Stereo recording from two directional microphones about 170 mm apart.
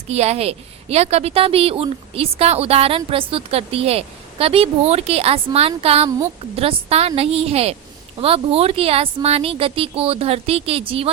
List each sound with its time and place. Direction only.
0.1 s a woman's voice: 40° right (ahead or behind)